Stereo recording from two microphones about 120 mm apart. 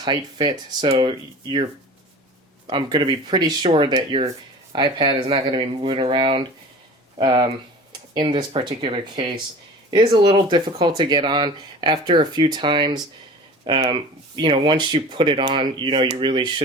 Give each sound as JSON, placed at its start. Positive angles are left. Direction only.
{"t": 0.0, "sound": "speech", "side_deg": -35}
{"t": 2.6, "sound": "speech", "side_deg": -40}
{"t": 4.7, "sound": "speech", "side_deg": -40}